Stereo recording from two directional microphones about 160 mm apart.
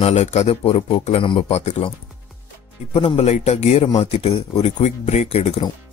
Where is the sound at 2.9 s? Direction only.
40° left (ahead or behind).